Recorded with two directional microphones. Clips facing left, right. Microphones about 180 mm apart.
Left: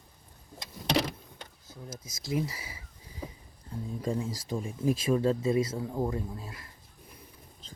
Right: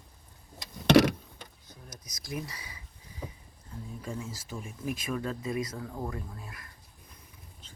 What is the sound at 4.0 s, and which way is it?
Speech, 35° left (ahead or behind).